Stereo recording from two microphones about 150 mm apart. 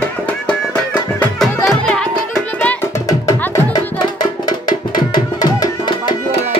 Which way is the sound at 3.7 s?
30° left (ahead or behind).